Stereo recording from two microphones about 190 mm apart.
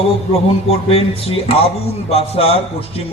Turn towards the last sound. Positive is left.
turn(degrees=30)  # may be behind; listen again after turning